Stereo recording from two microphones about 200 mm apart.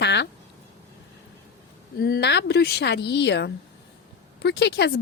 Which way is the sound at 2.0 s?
55° left (ahead or behind).